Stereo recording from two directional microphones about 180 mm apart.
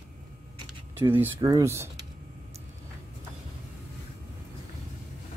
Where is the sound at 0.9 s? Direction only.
10° right (ahead or behind).